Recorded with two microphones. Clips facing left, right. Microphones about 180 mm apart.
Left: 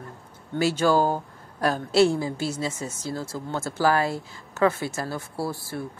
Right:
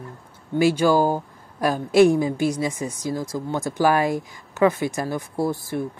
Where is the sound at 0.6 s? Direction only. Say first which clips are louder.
Right 3 dB; 10° right (ahead or behind).